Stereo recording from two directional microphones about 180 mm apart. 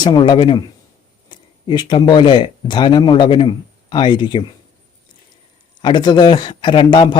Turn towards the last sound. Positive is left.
turn(degrees=25)  # may be behind; listen again after turning